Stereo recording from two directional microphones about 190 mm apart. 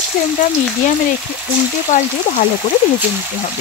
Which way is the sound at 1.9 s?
40° left (ahead or behind).